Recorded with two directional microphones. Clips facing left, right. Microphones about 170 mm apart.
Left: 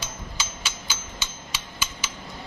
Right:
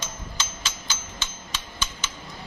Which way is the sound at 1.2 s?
10° left (ahead or behind).